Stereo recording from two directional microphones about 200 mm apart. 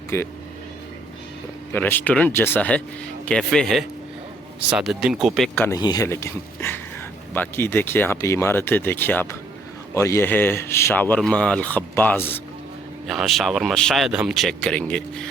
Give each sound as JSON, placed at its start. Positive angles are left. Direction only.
{"t": 0.1, "sound": "speech", "side_deg": 10}
{"t": 1.7, "sound": "speech", "side_deg": 10}
{"t": 5.6, "sound": "speech", "side_deg": 20}
{"t": 13.1, "sound": "speech", "side_deg": 0}